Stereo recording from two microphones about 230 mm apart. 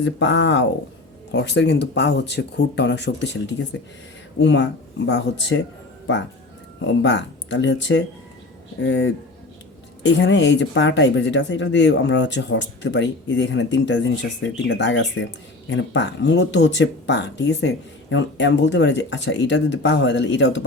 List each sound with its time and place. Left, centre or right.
0.0 s speech: left
6.8 s speech: left